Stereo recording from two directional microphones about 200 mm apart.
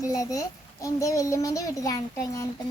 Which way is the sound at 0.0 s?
15° left (ahead or behind).